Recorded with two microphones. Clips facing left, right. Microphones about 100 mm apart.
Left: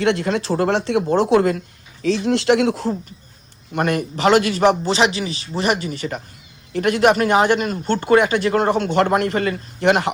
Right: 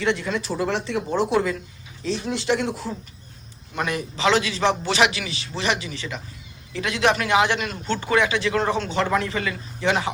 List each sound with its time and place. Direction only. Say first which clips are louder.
0.0 s speech: left 5 dB; 80° left
3.8 s speech: left 6 dB; 55° left (ahead or behind)
4.9 s speech: left 3 dB; 35° left (ahead or behind); by 10.1 s 60° left (ahead or behind)